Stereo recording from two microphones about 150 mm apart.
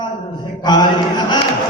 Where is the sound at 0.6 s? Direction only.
30° left (ahead or behind).